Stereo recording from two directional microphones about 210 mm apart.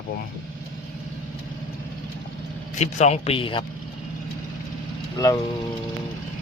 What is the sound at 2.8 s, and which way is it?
Speech, 30° left (ahead or behind).